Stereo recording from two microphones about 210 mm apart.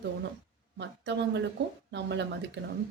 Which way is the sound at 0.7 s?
55° right (ahead or behind).